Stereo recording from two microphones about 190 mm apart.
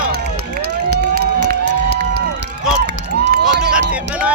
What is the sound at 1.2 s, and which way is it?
Run, 60° right (ahead or behind).